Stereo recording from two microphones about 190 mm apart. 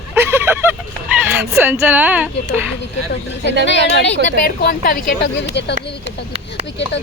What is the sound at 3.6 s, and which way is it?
Speech, 70° left (ahead or behind).